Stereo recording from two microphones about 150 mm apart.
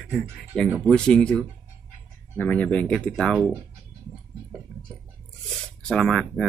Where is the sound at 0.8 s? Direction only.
5° left (ahead or behind).